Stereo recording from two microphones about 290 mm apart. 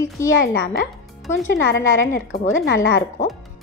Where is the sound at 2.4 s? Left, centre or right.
Left.